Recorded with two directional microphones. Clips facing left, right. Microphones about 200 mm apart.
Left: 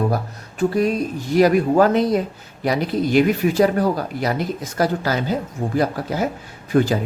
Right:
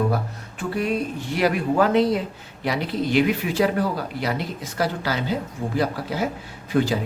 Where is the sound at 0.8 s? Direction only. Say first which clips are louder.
Left 4 dB; 40° left (ahead or behind).